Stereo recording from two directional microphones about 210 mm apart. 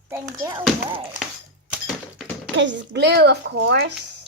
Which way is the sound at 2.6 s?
55° right (ahead or behind).